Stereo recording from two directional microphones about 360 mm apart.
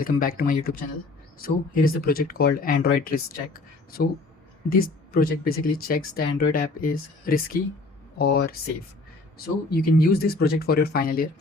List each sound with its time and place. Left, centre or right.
0.0 s speech: left
9.6 s speech: left